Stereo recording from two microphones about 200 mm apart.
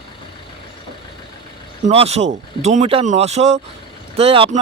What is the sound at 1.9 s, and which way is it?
Speech, 30° right (ahead or behind).